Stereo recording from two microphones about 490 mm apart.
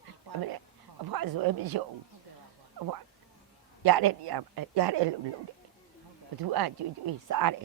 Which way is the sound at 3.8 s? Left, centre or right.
Right.